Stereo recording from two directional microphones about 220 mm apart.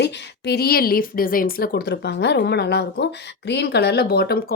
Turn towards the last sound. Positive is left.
turn(degrees=45)  # may be behind; listen again after turning